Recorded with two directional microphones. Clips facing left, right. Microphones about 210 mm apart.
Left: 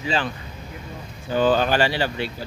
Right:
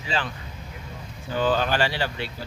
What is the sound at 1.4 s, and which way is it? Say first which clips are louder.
Speech: left 4 dB; 15° left (ahead or behind).